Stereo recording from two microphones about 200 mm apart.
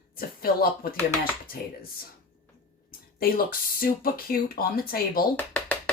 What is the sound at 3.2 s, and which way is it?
Speech, 50° left (ahead or behind).